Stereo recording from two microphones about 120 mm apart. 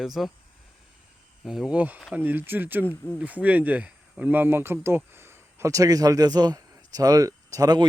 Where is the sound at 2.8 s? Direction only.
15° left (ahead or behind).